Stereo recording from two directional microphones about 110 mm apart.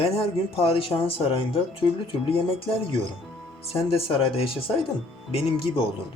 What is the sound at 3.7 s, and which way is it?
Speech, 60° left (ahead or behind).